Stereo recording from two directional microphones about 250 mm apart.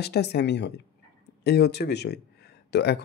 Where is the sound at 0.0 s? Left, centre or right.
Left.